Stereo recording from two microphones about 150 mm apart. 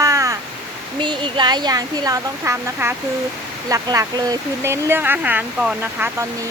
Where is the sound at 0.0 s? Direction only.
20° right (ahead or behind).